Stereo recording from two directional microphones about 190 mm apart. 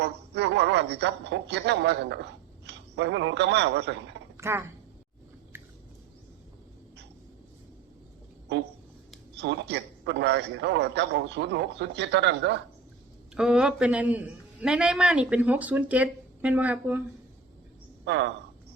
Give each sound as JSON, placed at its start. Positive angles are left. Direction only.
{"t": 0.0, "sound": "a man's voice", "side_deg": -65}
{"t": 4.4, "sound": "a sound", "side_deg": -15}
{"t": 8.5, "sound": "a man's voice", "side_deg": -65}
{"t": 13.3, "sound": "a man's voice", "side_deg": -5}
{"t": 18.0, "sound": "a woman's voice", "side_deg": -65}